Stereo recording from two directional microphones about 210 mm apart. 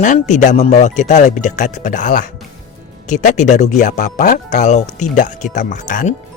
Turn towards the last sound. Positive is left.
turn(degrees=35)  # may be behind; listen again after turning